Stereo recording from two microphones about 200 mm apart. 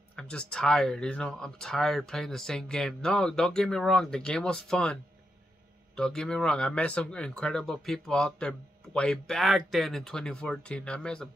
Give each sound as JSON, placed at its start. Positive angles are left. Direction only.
{"t": 0.1, "sound": "speech", "side_deg": 5}
{"t": 5.9, "sound": "speech", "side_deg": 5}